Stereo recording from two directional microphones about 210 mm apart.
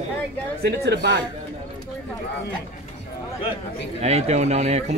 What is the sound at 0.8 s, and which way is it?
Speech, 55° right (ahead or behind).